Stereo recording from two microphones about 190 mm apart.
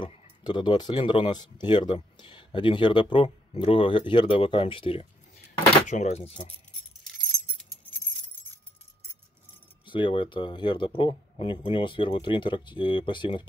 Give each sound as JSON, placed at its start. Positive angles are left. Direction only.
{"t": 0.0, "sound": "speech", "side_deg": 30}
{"t": 5.9, "sound": "speech", "side_deg": 35}
{"t": 9.8, "sound": "speech", "side_deg": 25}